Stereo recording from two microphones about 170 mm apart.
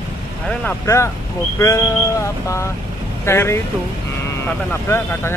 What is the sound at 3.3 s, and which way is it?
Speech, 15° left (ahead or behind).